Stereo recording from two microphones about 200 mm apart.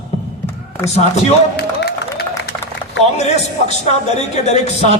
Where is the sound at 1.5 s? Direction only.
55° left (ahead or behind).